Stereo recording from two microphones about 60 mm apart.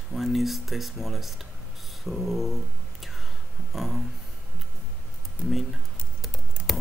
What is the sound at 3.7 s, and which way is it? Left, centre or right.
Speech, centre.